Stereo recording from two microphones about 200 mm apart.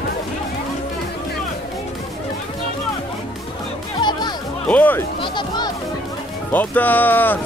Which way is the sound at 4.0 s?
20° left (ahead or behind).